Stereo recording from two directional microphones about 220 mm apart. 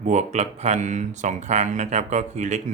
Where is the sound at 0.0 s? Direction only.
30° right (ahead or behind).